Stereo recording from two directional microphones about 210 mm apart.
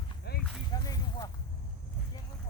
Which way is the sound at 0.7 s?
15° left (ahead or behind).